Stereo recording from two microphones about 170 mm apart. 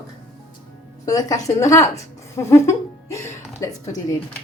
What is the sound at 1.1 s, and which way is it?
A woman's voice, 20° left (ahead or behind).